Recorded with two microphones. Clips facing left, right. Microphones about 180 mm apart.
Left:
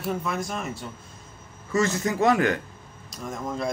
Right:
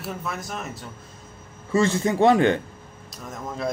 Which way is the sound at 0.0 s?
5° right (ahead or behind).